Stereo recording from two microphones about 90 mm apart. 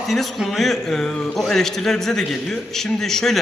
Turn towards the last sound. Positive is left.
turn(degrees=5)  # may be behind; listen again after turning